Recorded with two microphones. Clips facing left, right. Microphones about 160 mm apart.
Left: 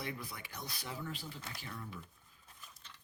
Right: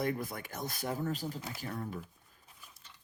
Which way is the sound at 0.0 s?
50° right (ahead or behind).